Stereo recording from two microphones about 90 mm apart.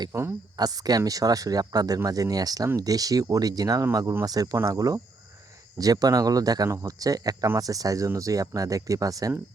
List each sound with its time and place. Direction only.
0.1 s speech: 30° right (ahead or behind)
0.5 s speech: 45° right (ahead or behind)